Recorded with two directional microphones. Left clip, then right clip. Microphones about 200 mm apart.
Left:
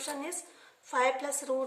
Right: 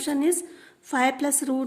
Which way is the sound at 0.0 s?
50° right (ahead or behind).